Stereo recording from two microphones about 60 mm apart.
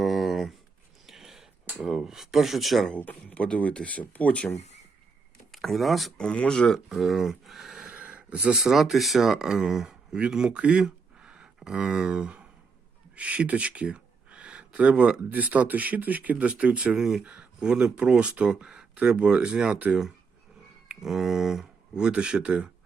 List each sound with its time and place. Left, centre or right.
0.0 s a sound: centre
1.8 s speech: centre
2.9 s speech: left
5.5 s speech: centre
6.1 s speech: centre
6.8 s speech: centre
7.9 s speech: right
17.0 s speech: centre
21.0 s speech: centre